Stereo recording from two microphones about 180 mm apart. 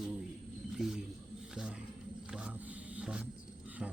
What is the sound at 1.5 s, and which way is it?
Wild animals, 5° right (ahead or behind).